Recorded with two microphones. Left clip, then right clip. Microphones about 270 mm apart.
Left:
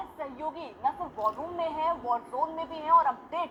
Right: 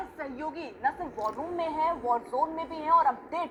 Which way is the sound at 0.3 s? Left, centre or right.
Right.